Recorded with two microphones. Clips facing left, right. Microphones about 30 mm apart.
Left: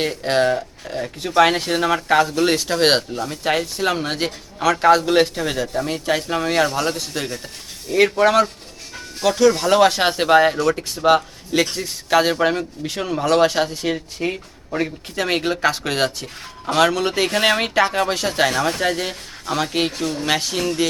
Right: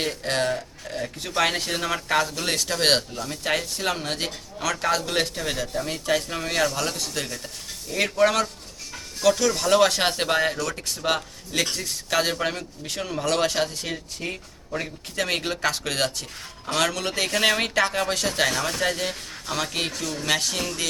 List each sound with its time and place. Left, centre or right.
0.0 s speech: centre